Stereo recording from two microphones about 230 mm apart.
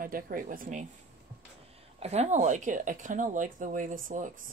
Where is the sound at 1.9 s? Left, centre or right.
Right.